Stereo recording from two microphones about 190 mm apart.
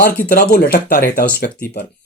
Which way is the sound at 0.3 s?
50° left (ahead or behind).